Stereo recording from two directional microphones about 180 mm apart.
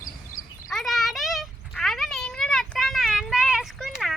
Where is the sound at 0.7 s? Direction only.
Centre (ahead or behind).